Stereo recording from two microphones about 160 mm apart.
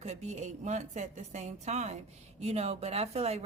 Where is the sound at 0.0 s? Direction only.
45° right (ahead or behind).